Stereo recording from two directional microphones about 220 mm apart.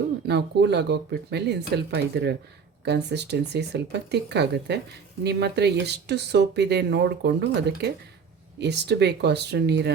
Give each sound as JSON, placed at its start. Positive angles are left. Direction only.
{"t": 0.3, "sound": "speech", "side_deg": -50}